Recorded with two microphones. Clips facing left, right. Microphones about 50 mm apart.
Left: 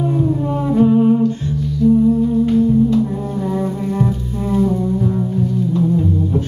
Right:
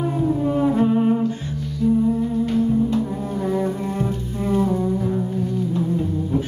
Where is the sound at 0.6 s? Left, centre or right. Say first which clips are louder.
Left 6 dB; centre.